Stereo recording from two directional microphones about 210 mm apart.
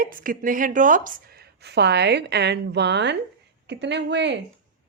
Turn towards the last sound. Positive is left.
turn(degrees=-55)  # may be behind; listen again after turning